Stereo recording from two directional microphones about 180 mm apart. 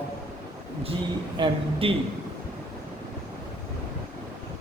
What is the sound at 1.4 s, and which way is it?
Speech, 25° right (ahead or behind).